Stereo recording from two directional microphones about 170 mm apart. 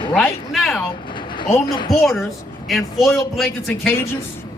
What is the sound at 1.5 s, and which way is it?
Speech, 25° left (ahead or behind).